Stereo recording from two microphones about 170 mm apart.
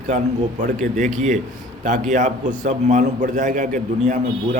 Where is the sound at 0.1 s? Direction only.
45° right (ahead or behind).